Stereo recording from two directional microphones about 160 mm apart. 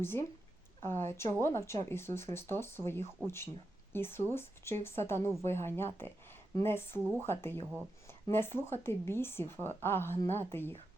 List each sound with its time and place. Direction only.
0.0 s speech: 15° left (ahead or behind)